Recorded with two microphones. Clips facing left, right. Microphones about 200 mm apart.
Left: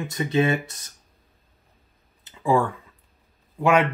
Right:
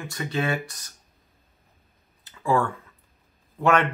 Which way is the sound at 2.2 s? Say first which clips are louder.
Left 2 dB; 15° left (ahead or behind).